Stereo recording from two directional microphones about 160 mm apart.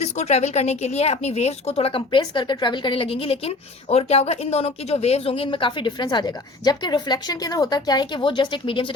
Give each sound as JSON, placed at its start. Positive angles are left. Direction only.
{"t": 0.0, "sound": "a woman's voice", "side_deg": 45}